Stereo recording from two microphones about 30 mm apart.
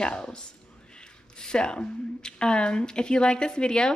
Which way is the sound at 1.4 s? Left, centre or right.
Left.